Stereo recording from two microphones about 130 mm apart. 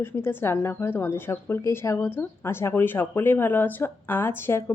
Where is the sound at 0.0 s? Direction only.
15° left (ahead or behind).